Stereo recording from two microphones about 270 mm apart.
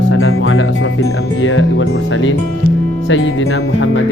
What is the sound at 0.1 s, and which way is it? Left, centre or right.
Music, left.